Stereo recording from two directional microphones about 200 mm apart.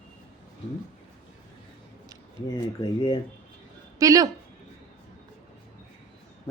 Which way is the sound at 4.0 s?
15° right (ahead or behind).